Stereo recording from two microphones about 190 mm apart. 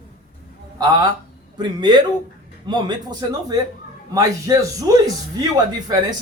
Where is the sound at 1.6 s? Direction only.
25° right (ahead or behind).